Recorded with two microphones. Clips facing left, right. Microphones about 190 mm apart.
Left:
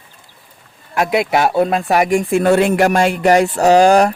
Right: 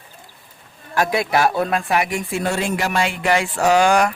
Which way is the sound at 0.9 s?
20° left (ahead or behind).